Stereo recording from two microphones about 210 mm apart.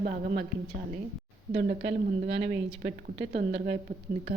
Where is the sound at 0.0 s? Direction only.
40° right (ahead or behind).